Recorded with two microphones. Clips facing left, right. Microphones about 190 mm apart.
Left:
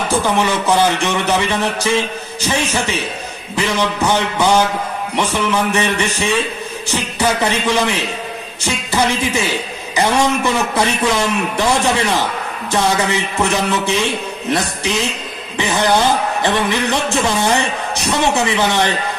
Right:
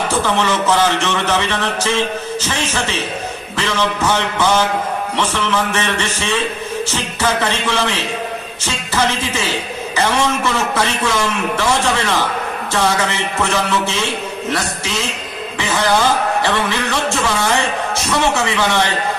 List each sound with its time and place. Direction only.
0.2 s speech: 15° left (ahead or behind)